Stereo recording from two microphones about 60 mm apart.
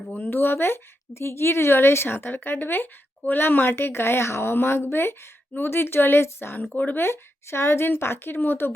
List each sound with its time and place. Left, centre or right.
0.1 s a woman's voice: left
6.7 s speech: left
7.0 s a woman's voice: left